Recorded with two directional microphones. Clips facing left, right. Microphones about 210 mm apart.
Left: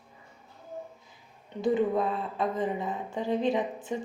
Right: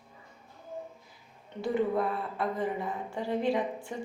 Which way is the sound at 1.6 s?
20° left (ahead or behind).